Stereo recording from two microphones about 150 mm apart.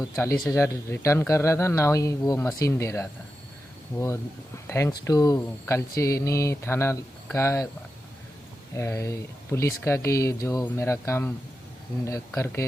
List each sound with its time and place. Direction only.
0.0 s speech: 20° left (ahead or behind)
8.7 s speech: 20° left (ahead or behind)
12.4 s speech: 20° left (ahead or behind)